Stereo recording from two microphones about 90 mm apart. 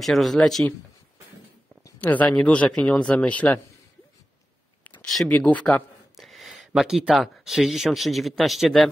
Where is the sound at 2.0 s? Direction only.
15° left (ahead or behind).